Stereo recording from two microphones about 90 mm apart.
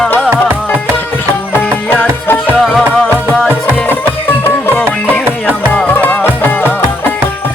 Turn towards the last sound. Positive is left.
turn(degrees=20)  # may be behind; listen again after turning